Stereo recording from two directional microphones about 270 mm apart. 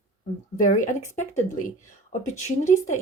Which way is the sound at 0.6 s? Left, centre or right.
Left.